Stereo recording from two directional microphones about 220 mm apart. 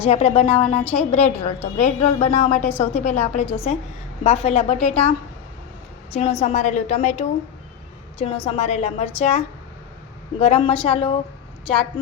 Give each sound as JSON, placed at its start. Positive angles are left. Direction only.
{"t": 0.0, "sound": "a woman's voice", "side_deg": 30}
{"t": 10.4, "sound": "a woman's voice", "side_deg": 25}